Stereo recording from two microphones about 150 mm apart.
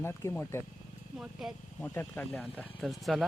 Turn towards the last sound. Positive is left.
turn(degrees=0)  # may be behind; listen again after turning